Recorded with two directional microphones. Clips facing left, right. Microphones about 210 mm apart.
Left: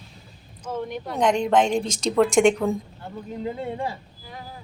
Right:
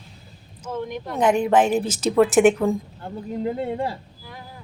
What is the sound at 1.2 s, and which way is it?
A woman's voice, 5° right (ahead or behind).